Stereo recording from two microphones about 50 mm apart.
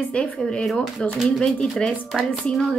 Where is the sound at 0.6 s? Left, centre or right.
Centre.